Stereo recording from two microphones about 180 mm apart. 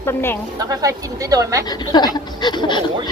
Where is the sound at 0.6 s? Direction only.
20° right (ahead or behind).